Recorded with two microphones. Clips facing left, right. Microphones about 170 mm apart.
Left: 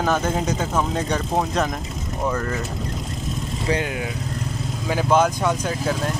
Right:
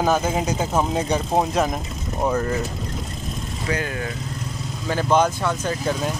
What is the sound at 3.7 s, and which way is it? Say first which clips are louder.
Speech: left 2 dB; 20° left (ahead or behind).